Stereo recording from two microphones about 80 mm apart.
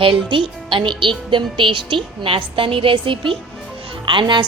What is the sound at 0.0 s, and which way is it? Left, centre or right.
A woman's voice, right.